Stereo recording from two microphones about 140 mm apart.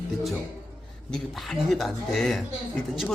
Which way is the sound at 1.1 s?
Centre (ahead or behind).